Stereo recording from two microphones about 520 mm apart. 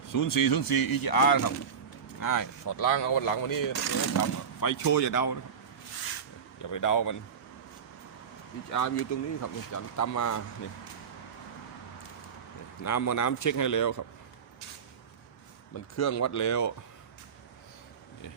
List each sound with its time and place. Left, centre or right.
0.1 s speech: left
6.6 s speech: left
8.7 s speech: left
12.8 s speech: left
16.0 s speech: left